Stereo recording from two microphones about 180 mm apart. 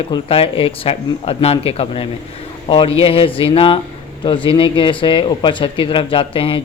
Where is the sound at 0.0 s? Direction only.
30° left (ahead or behind).